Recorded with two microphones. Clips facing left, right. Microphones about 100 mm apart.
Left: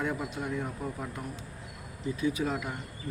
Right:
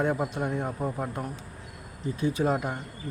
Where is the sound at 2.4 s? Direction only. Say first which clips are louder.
Right 6 dB; 35° right (ahead or behind).